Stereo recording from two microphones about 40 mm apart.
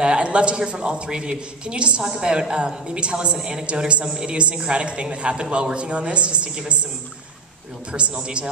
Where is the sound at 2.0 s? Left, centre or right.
Centre.